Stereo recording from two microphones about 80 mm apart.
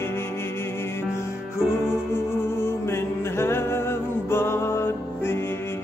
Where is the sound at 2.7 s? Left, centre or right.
Left.